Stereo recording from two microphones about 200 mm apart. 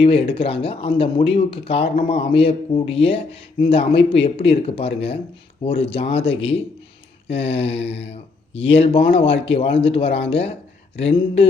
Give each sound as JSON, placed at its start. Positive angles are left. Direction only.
{"t": 0.0, "sound": "speech", "side_deg": 25}